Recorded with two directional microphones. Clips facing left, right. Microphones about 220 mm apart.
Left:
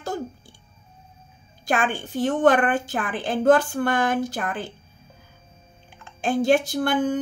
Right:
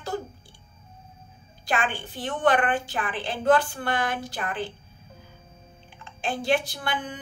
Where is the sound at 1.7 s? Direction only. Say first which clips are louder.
Left 4 dB; 45° left (ahead or behind).